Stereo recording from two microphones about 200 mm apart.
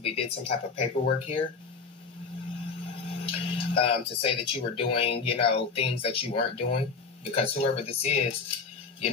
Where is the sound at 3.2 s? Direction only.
30° left (ahead or behind).